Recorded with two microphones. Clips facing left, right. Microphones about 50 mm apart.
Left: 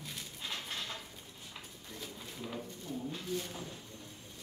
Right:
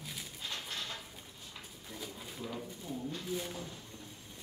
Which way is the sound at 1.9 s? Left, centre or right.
Centre.